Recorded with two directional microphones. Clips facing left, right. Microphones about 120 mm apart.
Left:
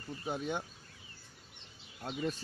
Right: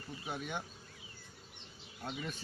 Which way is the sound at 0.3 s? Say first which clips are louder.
Left 5 dB; 20° left (ahead or behind).